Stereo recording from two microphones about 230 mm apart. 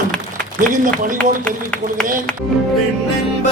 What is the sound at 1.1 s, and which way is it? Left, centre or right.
Speech, centre.